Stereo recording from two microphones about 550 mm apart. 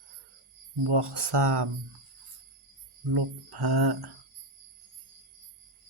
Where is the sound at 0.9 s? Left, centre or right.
Right.